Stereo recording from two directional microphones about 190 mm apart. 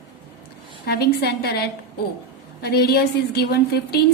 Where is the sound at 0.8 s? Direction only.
55° left (ahead or behind).